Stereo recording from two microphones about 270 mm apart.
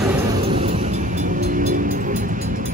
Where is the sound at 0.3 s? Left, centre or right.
Centre.